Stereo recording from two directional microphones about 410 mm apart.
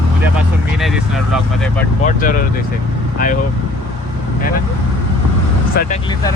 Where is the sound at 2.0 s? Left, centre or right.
Centre.